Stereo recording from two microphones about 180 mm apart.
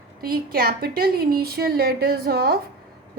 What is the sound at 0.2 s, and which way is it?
A woman's voice, 55° right (ahead or behind).